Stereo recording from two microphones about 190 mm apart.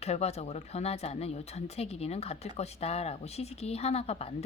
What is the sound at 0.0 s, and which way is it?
Speech, 35° left (ahead or behind).